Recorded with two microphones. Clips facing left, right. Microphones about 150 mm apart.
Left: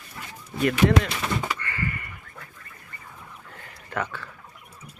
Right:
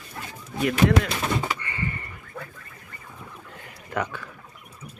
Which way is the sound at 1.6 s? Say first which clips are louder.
Left 1 dB; 20° right (ahead or behind).